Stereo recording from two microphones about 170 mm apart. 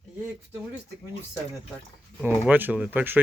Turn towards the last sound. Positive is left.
turn(degrees=-10)  # may be behind; listen again after turning